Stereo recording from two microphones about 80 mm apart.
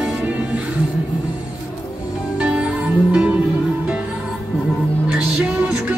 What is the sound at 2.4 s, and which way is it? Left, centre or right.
Music, centre.